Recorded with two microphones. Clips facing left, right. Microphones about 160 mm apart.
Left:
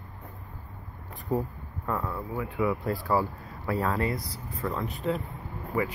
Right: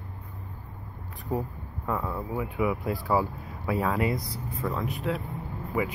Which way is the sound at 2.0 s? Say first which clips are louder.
Right 2 dB; 20° right (ahead or behind).